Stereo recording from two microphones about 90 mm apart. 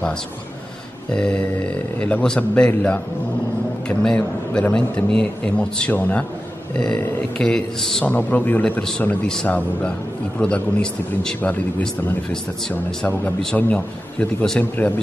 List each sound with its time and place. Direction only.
1.1 s a man's voice: 10° left (ahead or behind)
8.0 s a man's voice: 20° left (ahead or behind)
10.4 s a man's voice: 10° left (ahead or behind)